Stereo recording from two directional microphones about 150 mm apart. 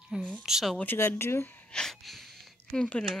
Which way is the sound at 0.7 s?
15° left (ahead or behind).